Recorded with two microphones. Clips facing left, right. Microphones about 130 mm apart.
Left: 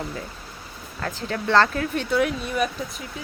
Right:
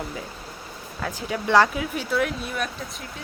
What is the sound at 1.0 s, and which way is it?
Speech, 10° right (ahead or behind).